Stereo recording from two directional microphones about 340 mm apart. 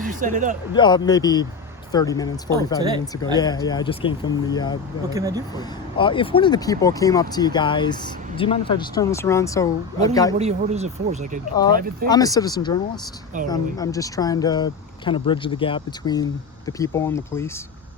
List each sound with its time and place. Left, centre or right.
0.0 s speech: right
0.7 s speech: centre
2.8 s speech: centre
3.3 s speech: centre
5.1 s speech: centre
5.5 s speech: centre
10.3 s speech: centre
11.5 s speech: centre